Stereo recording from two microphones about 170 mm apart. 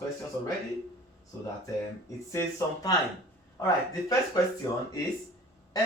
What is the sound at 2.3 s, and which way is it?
Speech, 20° left (ahead or behind).